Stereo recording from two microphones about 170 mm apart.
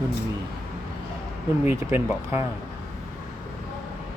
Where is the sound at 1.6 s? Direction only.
10° right (ahead or behind).